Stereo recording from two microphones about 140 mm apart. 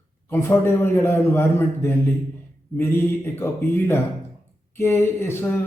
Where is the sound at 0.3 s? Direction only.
15° left (ahead or behind).